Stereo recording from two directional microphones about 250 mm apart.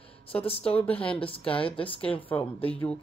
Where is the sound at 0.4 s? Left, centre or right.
Left.